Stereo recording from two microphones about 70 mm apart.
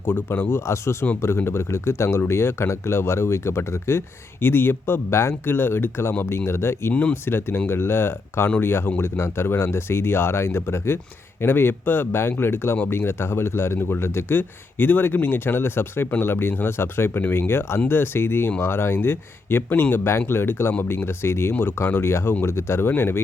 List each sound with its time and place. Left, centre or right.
0.1 s speech: left
6.9 s speech: centre
7.3 s speech: left